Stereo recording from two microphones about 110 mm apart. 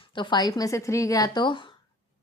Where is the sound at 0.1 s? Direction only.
45° left (ahead or behind).